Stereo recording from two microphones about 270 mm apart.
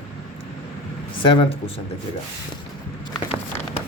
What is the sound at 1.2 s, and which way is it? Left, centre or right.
Speech, centre.